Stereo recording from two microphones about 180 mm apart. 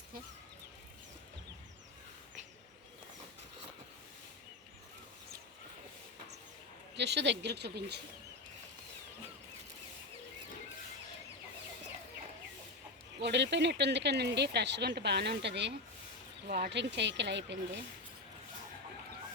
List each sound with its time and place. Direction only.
6.9 s speech: 70° right (ahead or behind)
13.1 s speech: 70° right (ahead or behind)